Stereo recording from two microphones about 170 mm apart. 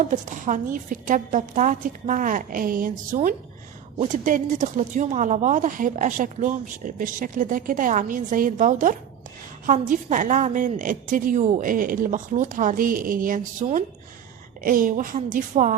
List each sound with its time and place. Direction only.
0.1 s speech: 50° right (ahead or behind)